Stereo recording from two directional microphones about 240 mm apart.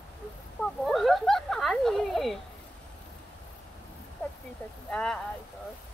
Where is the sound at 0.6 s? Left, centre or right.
Centre.